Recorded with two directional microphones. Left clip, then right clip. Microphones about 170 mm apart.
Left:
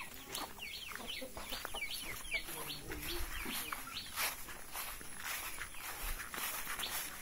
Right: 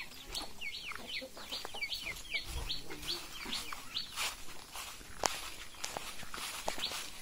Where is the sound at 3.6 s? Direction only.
10° left (ahead or behind).